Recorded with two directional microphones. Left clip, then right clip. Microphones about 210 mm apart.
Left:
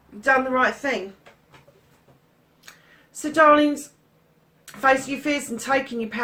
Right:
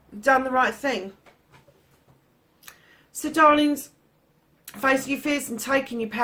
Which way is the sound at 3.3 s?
45° right (ahead or behind).